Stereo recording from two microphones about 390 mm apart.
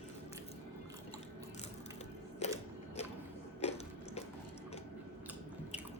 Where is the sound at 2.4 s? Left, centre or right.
Centre.